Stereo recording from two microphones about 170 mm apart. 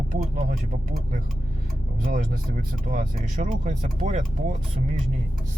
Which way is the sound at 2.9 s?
50° right (ahead or behind).